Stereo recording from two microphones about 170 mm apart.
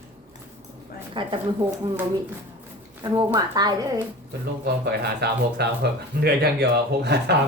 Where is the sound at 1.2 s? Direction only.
30° right (ahead or behind).